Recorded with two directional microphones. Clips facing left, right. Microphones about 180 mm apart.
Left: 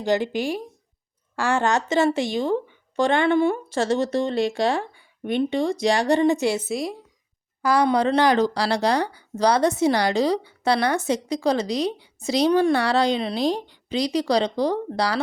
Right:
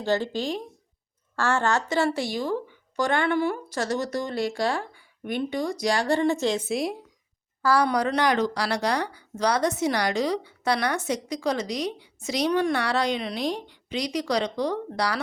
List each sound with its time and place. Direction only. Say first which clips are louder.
0.0 s a woman's voice: left 3 dB; 15° left (ahead or behind)
6.7 s a woman's voice: even; centre (ahead or behind)
7.6 s speech: left 3 dB; 20° left (ahead or behind)